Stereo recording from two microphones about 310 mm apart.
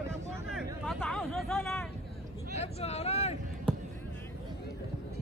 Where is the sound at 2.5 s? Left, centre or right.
Left.